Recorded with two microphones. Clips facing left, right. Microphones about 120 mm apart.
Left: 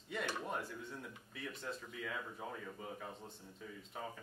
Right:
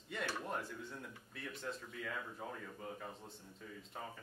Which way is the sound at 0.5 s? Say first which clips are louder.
Even; centre (ahead or behind).